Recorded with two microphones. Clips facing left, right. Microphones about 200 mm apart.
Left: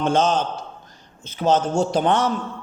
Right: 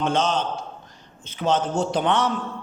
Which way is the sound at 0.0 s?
45° left (ahead or behind).